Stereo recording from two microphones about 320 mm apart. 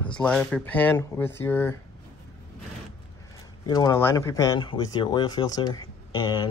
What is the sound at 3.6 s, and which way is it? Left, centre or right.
Speech, centre.